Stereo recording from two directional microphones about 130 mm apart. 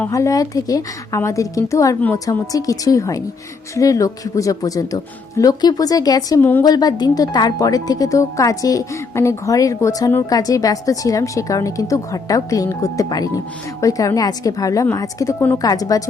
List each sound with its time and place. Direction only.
0.1 s speech: 25° left (ahead or behind)